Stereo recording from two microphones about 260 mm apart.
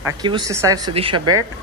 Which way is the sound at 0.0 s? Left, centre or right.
Centre.